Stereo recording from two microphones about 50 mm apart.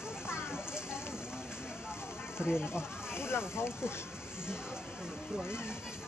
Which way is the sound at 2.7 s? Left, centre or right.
Left.